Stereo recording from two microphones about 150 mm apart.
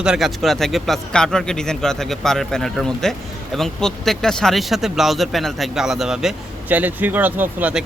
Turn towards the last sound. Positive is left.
turn(degrees=-10)  # may be behind; listen again after turning